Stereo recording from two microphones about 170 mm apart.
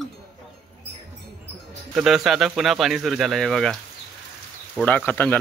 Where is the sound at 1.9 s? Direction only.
Centre (ahead or behind).